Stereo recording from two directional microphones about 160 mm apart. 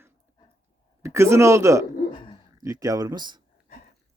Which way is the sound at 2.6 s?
20° right (ahead or behind).